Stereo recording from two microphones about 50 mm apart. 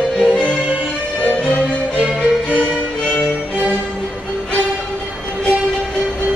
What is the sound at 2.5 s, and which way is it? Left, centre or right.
Music, left.